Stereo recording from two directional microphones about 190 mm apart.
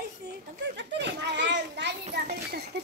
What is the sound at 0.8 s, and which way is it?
Children playing, 65° right (ahead or behind).